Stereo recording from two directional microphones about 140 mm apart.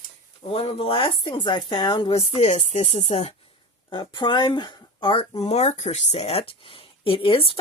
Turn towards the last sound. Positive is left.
turn(degrees=40)  # may be behind; listen again after turning